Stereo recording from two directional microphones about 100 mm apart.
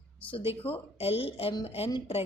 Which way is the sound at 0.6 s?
75° left (ahead or behind).